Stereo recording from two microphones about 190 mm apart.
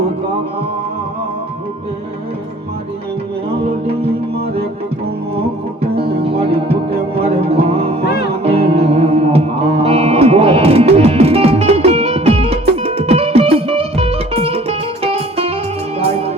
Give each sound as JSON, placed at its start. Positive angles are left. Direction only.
{"t": 3.5, "sound": "music", "side_deg": -30}
{"t": 5.8, "sound": "music", "side_deg": -30}